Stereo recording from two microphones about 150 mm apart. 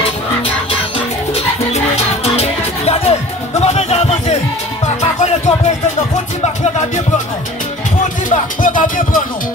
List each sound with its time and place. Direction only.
0.7 s music: 40° left (ahead or behind)
8.3 s music: 60° left (ahead or behind)